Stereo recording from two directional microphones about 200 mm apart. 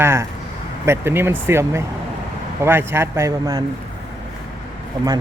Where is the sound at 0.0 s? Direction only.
15° right (ahead or behind).